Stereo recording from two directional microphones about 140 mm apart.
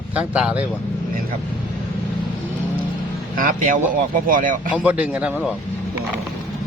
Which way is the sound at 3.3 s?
75° right (ahead or behind).